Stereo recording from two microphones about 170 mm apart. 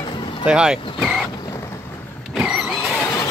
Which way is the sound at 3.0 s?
15° left (ahead or behind).